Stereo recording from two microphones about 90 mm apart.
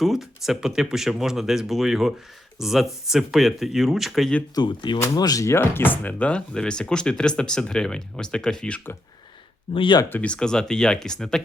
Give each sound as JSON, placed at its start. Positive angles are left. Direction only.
{"t": 0.0, "sound": "speech", "side_deg": 0}
{"t": 4.5, "sound": "speech", "side_deg": 60}
{"t": 5.1, "sound": "speech", "side_deg": 45}
{"t": 5.5, "sound": "speech", "side_deg": 20}
{"t": 9.7, "sound": "speech", "side_deg": 70}
{"t": 10.1, "sound": "speech", "side_deg": 15}